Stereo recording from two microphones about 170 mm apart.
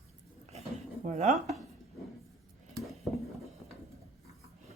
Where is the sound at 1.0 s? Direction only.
45° right (ahead or behind).